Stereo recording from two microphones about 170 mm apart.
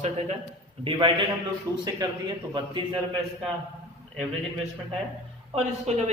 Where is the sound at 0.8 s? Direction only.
30° right (ahead or behind).